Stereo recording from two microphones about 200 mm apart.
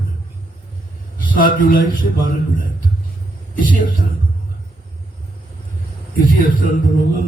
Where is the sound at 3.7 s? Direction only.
45° left (ahead or behind).